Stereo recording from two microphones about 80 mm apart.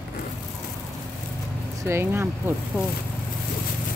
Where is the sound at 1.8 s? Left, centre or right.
Right.